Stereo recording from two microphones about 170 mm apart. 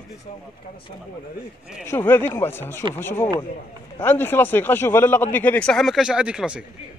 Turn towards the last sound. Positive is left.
turn(degrees=-5)  # may be behind; listen again after turning